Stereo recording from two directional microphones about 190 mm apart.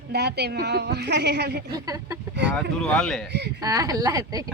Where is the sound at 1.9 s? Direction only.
20° right (ahead or behind).